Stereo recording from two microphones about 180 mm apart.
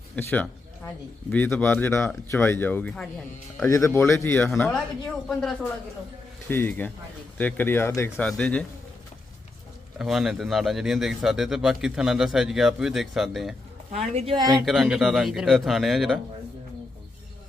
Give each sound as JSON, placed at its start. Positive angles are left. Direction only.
{"t": 0.2, "sound": "speech", "side_deg": 10}
{"t": 3.6, "sound": "a man's voice", "side_deg": 15}
{"t": 10.0, "sound": "a man's voice", "side_deg": 0}
{"t": 13.9, "sound": "speech", "side_deg": -35}
{"t": 14.3, "sound": "speech", "side_deg": -20}
{"t": 14.6, "sound": "a man's voice", "side_deg": 0}